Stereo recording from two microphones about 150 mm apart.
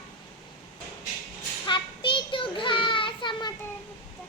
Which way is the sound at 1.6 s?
35° left (ahead or behind).